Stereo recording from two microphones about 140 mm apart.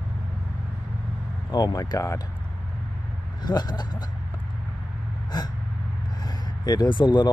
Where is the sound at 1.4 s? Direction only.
30° left (ahead or behind).